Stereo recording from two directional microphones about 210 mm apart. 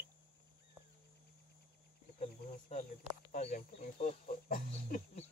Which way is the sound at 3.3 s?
35° left (ahead or behind).